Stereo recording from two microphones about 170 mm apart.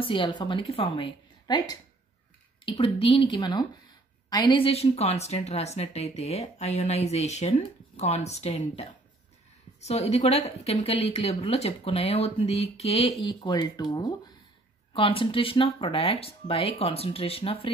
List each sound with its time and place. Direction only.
0.0 s a woman's voice: 30° left (ahead or behind)